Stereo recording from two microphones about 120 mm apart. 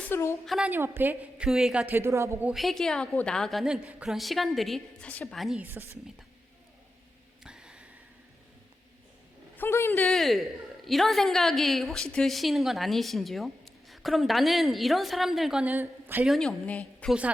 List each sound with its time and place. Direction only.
0.1 s a woman's voice: 25° left (ahead or behind)
0.4 s a woman's voice: centre (ahead or behind)
0.7 s a woman's voice: 15° right (ahead or behind)
2.0 s a woman's voice: 20° right (ahead or behind)
2.5 s a woman's voice: centre (ahead or behind)
5.0 s a woman's voice: 10° left (ahead or behind)
5.4 s a woman's voice: centre (ahead or behind)
5.6 s a woman's voice: 15° right (ahead or behind)
7.4 s a sound: 5° right (ahead or behind)
9.6 s a man's voice: 20° left (ahead or behind)
10.1 s a woman's voice: centre (ahead or behind); by 16.2 s 15° right (ahead or behind)
16.2 s a woman's voice: centre (ahead or behind)